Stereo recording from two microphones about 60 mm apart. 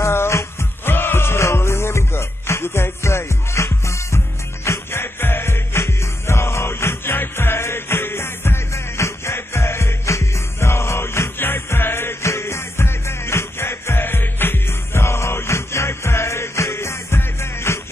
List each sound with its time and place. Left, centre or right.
0.0 s music: left
4.6 s music: left